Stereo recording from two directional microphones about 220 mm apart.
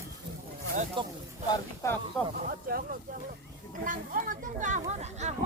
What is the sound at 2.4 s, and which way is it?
Speech, 40° right (ahead or behind).